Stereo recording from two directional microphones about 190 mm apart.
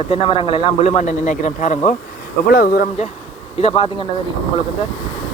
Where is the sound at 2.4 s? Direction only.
50° left (ahead or behind).